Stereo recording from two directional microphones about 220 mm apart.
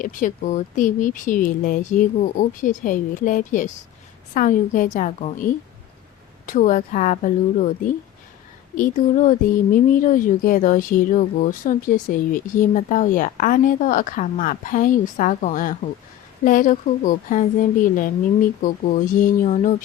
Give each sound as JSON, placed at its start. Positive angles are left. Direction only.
{"t": 0.0, "sound": "speech", "side_deg": 35}
{"t": 6.4, "sound": "speech", "side_deg": 35}
{"t": 8.7, "sound": "speech", "side_deg": 35}